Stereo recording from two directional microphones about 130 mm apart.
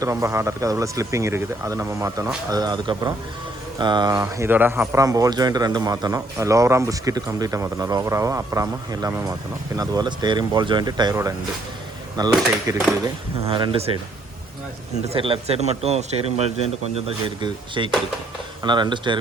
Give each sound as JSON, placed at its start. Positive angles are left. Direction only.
{"t": 0.0, "sound": "speech", "side_deg": -25}
{"t": 4.2, "sound": "speech", "side_deg": -20}
{"t": 4.9, "sound": "speech", "side_deg": -25}
{"t": 13.5, "sound": "speech", "side_deg": -40}
{"t": 15.1, "sound": "speech", "side_deg": -45}
{"t": 17.2, "sound": "speech", "side_deg": -40}